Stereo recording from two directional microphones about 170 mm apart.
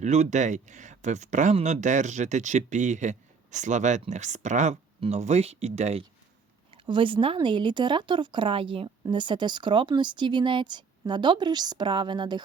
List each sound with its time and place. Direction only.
0.0 s speech: 45° right (ahead or behind); by 12.4 s 25° right (ahead or behind)